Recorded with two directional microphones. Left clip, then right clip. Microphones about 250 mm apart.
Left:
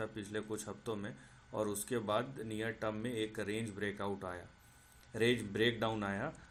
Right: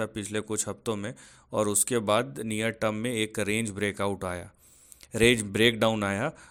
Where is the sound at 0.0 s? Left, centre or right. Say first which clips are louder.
Right 10 dB; right.